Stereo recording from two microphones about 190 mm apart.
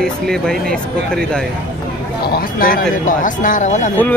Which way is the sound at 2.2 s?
50° left (ahead or behind).